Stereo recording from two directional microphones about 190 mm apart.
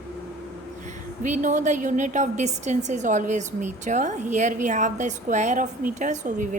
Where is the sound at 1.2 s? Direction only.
40° right (ahead or behind).